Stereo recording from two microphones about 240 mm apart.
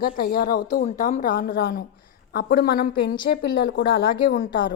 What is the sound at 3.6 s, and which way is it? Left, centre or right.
Speech, left.